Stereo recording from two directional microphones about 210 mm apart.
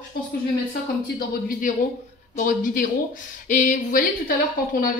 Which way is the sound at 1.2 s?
40° left (ahead or behind).